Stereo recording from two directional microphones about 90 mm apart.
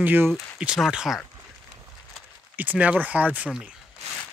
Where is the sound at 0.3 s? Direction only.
10° right (ahead or behind).